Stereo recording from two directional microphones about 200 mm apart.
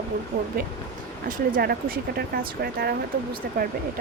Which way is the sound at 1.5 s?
50° right (ahead or behind).